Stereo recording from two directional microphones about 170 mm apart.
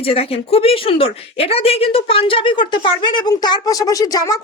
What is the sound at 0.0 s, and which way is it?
Speech, 35° left (ahead or behind).